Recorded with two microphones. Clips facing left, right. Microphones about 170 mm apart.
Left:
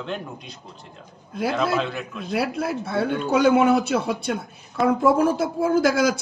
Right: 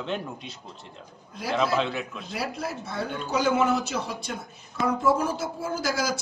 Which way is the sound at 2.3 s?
60° left (ahead or behind).